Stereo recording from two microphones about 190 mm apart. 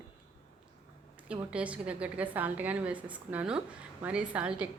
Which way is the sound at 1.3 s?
5° right (ahead or behind).